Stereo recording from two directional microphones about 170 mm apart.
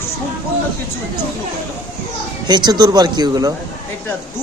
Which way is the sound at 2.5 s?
25° right (ahead or behind).